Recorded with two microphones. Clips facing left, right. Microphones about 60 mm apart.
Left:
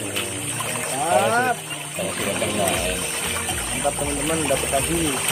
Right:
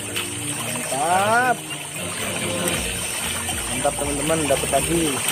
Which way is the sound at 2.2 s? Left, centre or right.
Centre.